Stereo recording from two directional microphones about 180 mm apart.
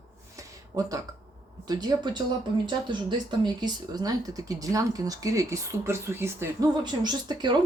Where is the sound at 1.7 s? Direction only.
20° right (ahead or behind).